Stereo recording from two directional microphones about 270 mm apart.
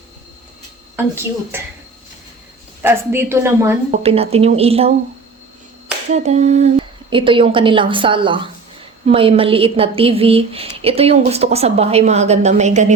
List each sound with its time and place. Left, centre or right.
0.9 s a woman's voice: centre
2.8 s a woman's voice: centre
4.0 s a woman's voice: right
6.1 s a woman's voice: right